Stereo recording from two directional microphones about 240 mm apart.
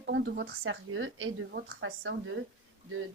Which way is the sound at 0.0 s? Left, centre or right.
Right.